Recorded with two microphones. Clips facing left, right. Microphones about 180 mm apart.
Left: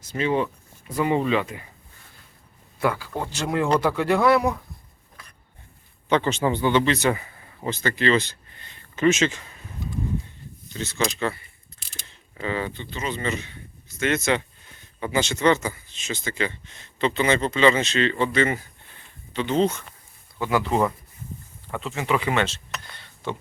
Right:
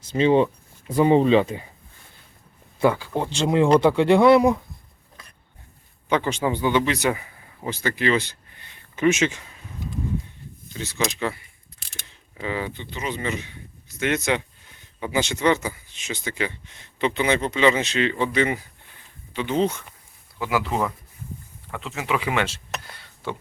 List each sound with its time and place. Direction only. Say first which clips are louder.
0.2 s speech: right 6 dB; 30° right (ahead or behind)
2.8 s speech: right 4 dB; 20° right (ahead or behind)
6.1 s speech: left 1 dB; 10° right (ahead or behind)
10.8 s speech: left 1 dB; 10° right (ahead or behind)
12.4 s speech: left 1 dB; 10° right (ahead or behind)